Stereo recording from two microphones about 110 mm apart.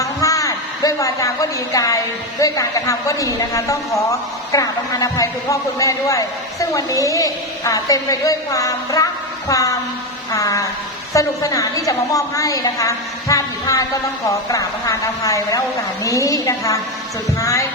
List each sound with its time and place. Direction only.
0.0 s a woman's voice: 30° left (ahead or behind)